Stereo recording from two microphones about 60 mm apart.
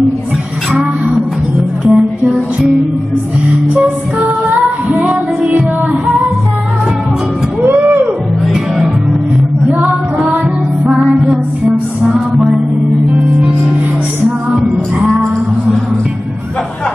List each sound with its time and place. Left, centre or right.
1.9 s music: centre
5.0 s music: right
7.6 s a sound: right
9.7 s music: right
12.0 s music: centre